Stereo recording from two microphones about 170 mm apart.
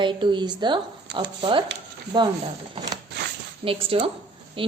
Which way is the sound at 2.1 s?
25° right (ahead or behind).